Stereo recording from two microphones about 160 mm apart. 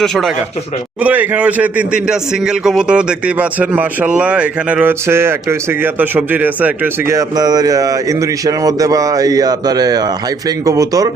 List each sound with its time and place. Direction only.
0.0 s speech: centre (ahead or behind)
1.0 s speech: 10° right (ahead or behind)